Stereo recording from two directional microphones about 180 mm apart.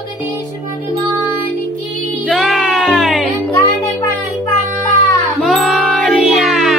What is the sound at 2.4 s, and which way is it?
Music, 5° right (ahead or behind).